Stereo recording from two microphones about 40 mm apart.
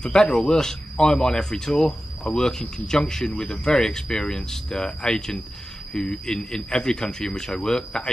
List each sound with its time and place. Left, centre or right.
0.0 s speech: centre